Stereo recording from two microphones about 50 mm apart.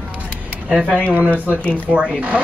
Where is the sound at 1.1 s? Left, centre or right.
Right.